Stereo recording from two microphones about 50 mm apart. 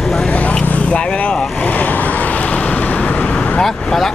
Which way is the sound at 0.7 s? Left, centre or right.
Left.